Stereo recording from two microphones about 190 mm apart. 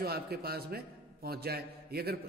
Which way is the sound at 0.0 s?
55° right (ahead or behind).